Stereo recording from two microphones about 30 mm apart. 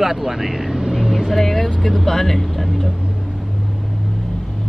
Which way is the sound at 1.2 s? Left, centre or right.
Centre.